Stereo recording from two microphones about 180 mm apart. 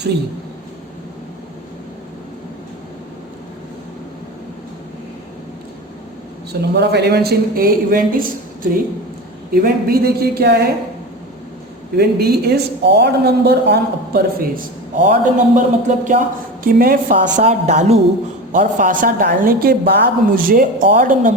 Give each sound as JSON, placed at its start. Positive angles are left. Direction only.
{"t": 6.5, "sound": "speech", "side_deg": -65}
{"t": 9.5, "sound": "speech", "side_deg": -55}
{"t": 11.9, "sound": "a woman's voice", "side_deg": -60}
{"t": 17.3, "sound": "a woman's voice", "side_deg": -40}